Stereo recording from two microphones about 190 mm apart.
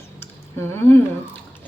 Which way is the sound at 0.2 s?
10° left (ahead or behind).